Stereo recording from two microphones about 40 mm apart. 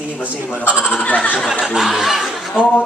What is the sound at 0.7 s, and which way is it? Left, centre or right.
Speech, right.